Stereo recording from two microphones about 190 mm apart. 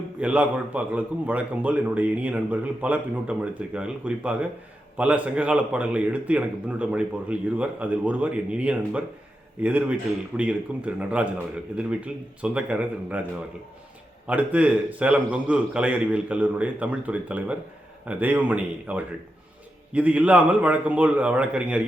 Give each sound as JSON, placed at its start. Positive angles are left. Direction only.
{"t": 0.2, "sound": "a man's voice", "side_deg": -5}
{"t": 14.3, "sound": "a man's voice", "side_deg": -5}